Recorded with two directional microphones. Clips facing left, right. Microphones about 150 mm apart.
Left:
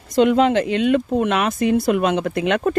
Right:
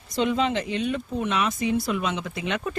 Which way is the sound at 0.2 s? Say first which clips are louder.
Left 9 dB; 55° left (ahead or behind).